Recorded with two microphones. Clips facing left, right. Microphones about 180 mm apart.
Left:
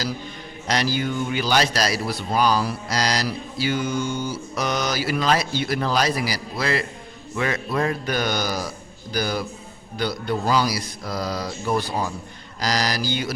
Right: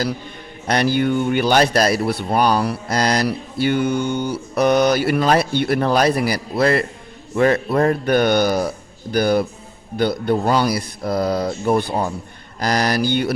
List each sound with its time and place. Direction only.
0.7 s a man's voice: 55° right (ahead or behind)